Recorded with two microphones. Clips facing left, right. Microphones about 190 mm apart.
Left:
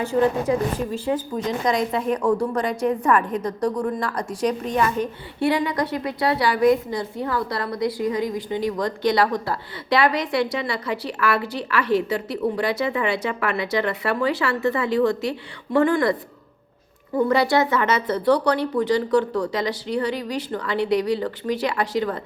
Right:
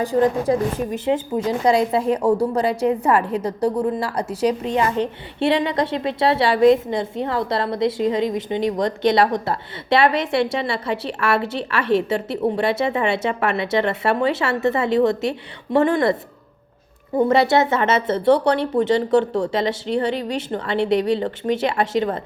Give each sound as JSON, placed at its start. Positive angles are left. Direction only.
{"t": 0.0, "sound": "a woman's voice", "side_deg": -35}
{"t": 0.9, "sound": "speech", "side_deg": -20}
{"t": 17.2, "sound": "speech", "side_deg": -25}